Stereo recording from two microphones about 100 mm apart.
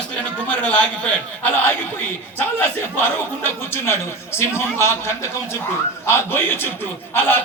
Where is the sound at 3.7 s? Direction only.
25° left (ahead or behind).